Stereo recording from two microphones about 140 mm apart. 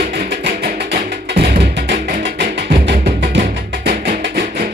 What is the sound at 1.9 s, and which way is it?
Music, 80° right.